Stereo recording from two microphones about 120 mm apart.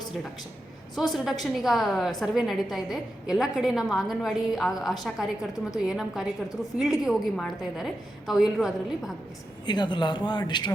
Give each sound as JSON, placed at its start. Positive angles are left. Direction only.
{"t": 0.9, "sound": "a woman's voice", "side_deg": 0}
{"t": 9.6, "sound": "speech", "side_deg": 40}